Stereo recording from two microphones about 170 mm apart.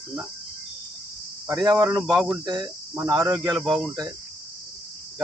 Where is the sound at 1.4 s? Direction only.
20° right (ahead or behind).